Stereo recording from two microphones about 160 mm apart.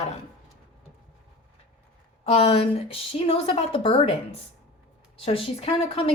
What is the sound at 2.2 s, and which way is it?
A woman's voice, 35° left (ahead or behind).